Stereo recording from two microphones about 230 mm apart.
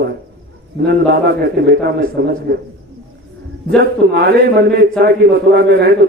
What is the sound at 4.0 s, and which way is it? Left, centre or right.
Speech, right.